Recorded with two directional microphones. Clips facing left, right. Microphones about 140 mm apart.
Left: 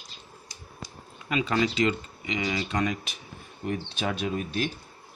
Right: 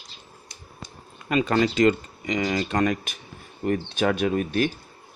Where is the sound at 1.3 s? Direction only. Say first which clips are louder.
Right 4 dB; 45° right (ahead or behind).